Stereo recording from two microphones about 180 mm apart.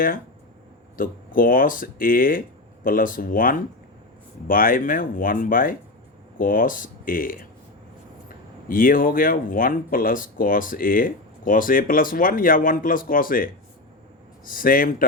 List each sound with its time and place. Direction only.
0.9 s speech: 50° left (ahead or behind)
8.7 s speech: 50° left (ahead or behind)